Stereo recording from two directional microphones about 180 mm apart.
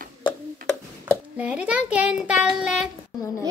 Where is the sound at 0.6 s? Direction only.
10° right (ahead or behind).